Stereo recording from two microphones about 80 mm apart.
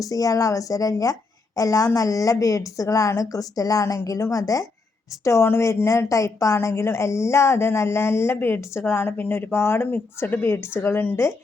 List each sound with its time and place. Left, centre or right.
0.0 s a woman's voice: left